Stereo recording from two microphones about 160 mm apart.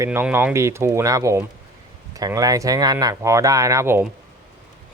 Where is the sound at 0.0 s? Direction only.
15° right (ahead or behind).